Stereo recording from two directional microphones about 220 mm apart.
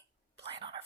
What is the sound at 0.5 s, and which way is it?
Speech, 20° right (ahead or behind).